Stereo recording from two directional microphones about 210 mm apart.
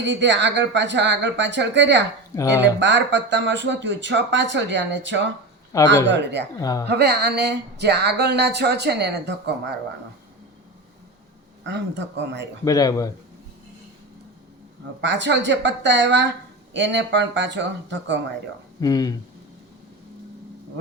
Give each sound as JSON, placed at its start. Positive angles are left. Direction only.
{"t": 0.0, "sound": "speech", "side_deg": -60}
{"t": 2.3, "sound": "speech", "side_deg": 15}
{"t": 2.8, "sound": "speech", "side_deg": -60}
{"t": 5.7, "sound": "speech", "side_deg": 15}
{"t": 6.1, "sound": "speech", "side_deg": -60}
{"t": 6.6, "sound": "speech", "side_deg": 15}
{"t": 6.8, "sound": "speech", "side_deg": -50}
{"t": 11.6, "sound": "speech", "side_deg": -55}
{"t": 12.6, "sound": "speech", "side_deg": 15}
{"t": 15.0, "sound": "speech", "side_deg": -60}
{"t": 18.8, "sound": "speech", "side_deg": 20}